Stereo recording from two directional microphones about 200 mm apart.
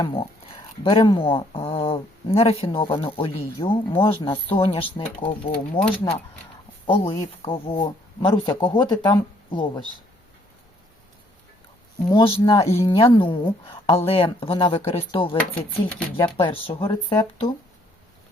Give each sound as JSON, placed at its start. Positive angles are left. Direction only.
{"t": 0.0, "sound": "speech", "side_deg": 25}
{"t": 11.9, "sound": "speech", "side_deg": 20}
{"t": 16.4, "sound": "speech", "side_deg": 25}